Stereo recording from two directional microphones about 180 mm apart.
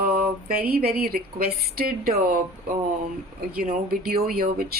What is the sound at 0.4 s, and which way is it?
Speech, 55° right (ahead or behind).